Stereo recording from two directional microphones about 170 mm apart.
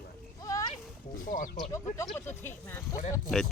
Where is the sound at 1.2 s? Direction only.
55° left (ahead or behind).